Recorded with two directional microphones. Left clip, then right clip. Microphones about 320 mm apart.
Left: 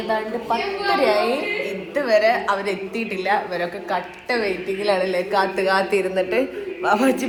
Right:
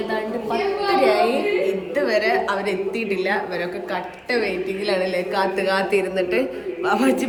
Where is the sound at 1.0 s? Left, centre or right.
Centre.